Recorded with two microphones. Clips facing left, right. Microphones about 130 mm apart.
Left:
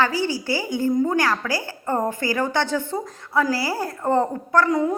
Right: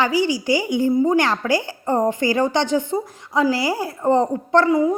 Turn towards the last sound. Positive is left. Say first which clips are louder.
# right 4 dB
turn(degrees=-10)  # may be behind; listen again after turning